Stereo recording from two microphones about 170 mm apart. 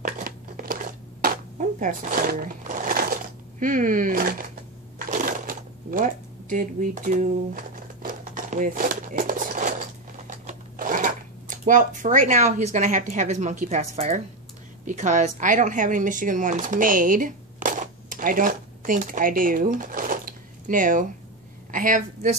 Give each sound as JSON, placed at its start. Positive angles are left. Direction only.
{"t": 0.0, "sound": "a sound", "side_deg": -55}
{"t": 4.9, "sound": "shuffling cards", "side_deg": -55}
{"t": 10.2, "sound": "a woman's voice", "side_deg": -50}